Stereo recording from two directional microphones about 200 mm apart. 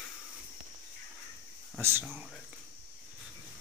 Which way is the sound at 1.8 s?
10° right (ahead or behind).